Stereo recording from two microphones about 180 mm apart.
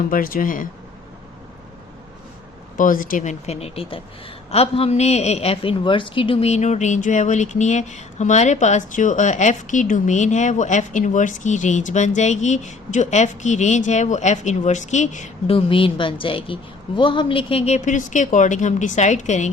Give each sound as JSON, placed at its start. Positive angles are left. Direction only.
{"t": 0.1, "sound": "speech", "side_deg": 50}
{"t": 2.7, "sound": "a woman's voice", "side_deg": 50}